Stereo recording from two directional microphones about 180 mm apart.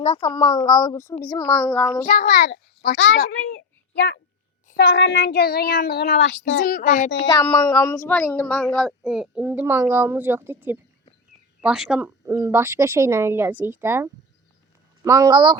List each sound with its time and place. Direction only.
0.2 s speech: 25° left (ahead or behind); by 1.9 s 5° left (ahead or behind)
2.0 s a child's voice: 50° left (ahead or behind)
2.5 s a child's voice: 65° left (ahead or behind)
6.7 s a child's voice: 50° left (ahead or behind)
7.3 s speech: 20° left (ahead or behind); by 15.5 s 25° right (ahead or behind)